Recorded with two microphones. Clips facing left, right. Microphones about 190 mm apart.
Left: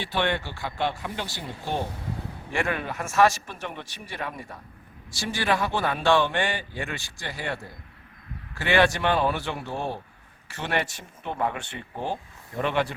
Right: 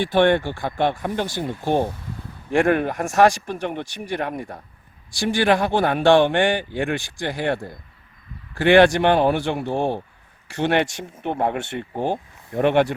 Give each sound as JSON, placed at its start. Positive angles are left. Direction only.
{"t": 0.0, "sound": "speech", "side_deg": -50}